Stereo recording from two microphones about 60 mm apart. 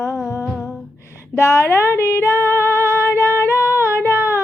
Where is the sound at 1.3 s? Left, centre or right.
Left.